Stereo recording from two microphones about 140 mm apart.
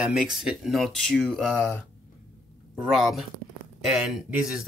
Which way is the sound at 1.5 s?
15° left (ahead or behind).